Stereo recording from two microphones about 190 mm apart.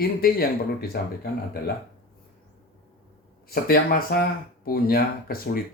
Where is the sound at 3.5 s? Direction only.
50° left (ahead or behind).